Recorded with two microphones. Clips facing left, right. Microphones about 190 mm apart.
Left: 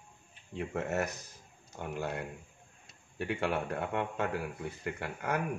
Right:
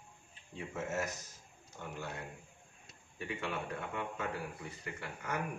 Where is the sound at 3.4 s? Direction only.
70° left (ahead or behind).